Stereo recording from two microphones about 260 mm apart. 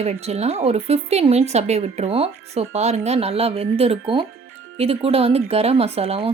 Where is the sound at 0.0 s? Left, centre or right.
Right.